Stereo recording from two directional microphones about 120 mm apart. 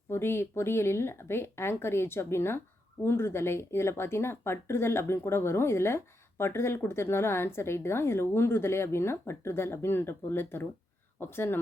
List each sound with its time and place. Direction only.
0.1 s speech: 20° left (ahead or behind)